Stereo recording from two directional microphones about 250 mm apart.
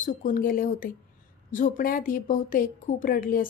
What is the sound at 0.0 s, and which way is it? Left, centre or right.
A woman's voice, left.